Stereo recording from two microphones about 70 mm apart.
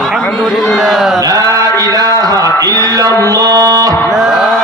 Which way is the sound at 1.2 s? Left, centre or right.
Right.